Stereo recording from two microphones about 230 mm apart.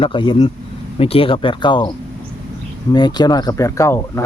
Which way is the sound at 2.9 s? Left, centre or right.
Centre.